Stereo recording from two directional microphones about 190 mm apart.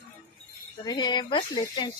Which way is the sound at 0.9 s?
25° left (ahead or behind).